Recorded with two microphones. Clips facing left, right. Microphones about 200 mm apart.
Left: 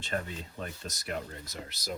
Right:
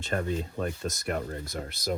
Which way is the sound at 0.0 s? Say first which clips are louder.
Right 6 dB; 45° right (ahead or behind).